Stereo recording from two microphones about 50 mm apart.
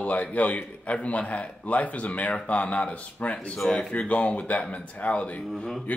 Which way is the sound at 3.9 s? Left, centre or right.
Left.